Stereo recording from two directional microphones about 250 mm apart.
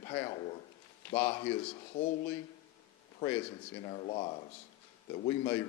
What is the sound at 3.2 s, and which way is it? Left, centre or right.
Speech, centre.